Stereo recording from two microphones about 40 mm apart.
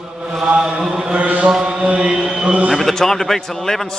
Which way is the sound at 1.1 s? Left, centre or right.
Right.